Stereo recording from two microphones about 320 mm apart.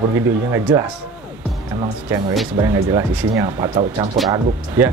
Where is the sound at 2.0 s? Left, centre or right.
Centre.